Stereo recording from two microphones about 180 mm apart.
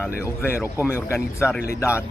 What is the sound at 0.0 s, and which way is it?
Speech, 15° left (ahead or behind).